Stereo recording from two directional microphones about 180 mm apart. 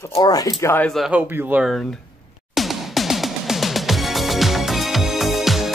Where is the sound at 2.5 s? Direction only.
Centre (ahead or behind).